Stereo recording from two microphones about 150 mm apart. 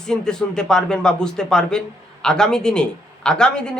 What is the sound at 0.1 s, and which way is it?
Speech, 5° left (ahead or behind).